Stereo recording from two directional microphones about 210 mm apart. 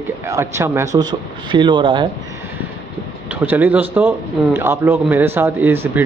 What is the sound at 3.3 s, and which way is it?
Speech, 10° right (ahead or behind).